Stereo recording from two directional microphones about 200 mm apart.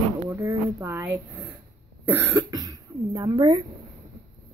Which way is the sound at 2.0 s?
10° right (ahead or behind).